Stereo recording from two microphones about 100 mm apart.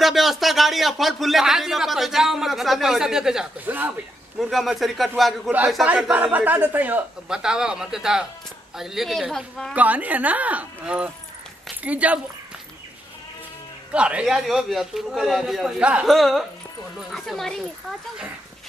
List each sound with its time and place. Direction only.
0.0 s speech: centre (ahead or behind)
3.6 s speech: 20° right (ahead or behind)
4.4 s speech: centre (ahead or behind)
5.9 s speech: 10° right (ahead or behind); by 9.8 s 5° left (ahead or behind)
9.8 s speech: 15° right (ahead or behind)
13.9 s speech: 10° right (ahead or behind)